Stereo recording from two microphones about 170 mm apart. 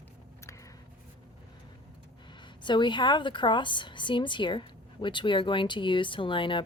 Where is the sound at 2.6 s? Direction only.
25° left (ahead or behind).